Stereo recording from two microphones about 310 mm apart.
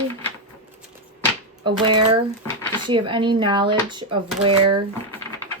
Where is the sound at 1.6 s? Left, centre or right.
Centre.